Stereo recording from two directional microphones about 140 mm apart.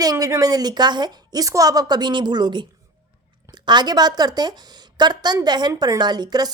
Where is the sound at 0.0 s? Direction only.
25° right (ahead or behind).